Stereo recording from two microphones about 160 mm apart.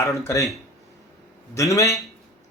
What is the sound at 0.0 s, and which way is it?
Speech, 20° left (ahead or behind).